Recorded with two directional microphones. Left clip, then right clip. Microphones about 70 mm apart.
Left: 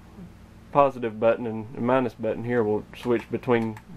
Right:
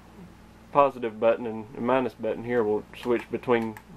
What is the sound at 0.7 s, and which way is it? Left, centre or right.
A man's voice, left.